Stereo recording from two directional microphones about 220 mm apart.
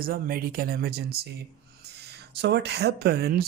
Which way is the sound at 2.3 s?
50° right (ahead or behind).